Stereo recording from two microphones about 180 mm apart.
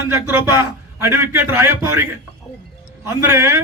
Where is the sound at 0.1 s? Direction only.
15° right (ahead or behind).